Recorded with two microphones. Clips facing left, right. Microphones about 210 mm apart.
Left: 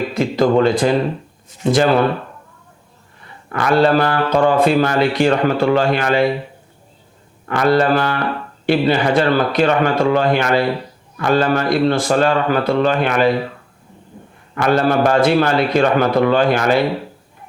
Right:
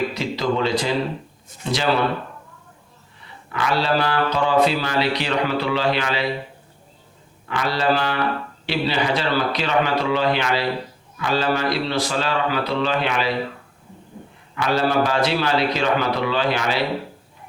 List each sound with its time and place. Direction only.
0.1 s speech: 50° left (ahead or behind)
3.5 s speech: 50° left (ahead or behind)
7.4 s speech: 50° left (ahead or behind)
14.5 s speech: 50° left (ahead or behind)